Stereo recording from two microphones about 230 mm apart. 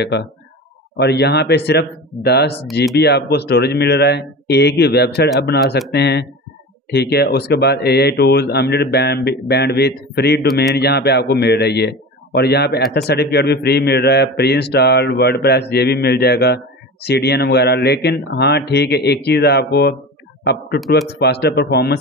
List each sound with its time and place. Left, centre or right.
0.0 s a man's voice: left
21.2 s a man's voice: left